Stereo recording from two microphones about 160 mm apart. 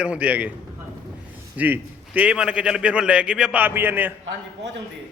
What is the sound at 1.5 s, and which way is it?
A man's voice, 10° right (ahead or behind).